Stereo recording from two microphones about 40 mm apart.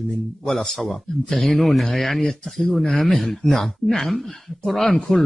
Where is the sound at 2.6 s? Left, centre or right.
Centre.